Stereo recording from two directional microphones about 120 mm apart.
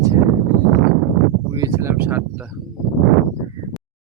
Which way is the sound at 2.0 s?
15° right (ahead or behind).